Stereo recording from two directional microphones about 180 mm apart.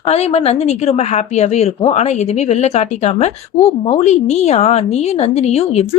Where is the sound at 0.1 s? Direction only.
35° left (ahead or behind).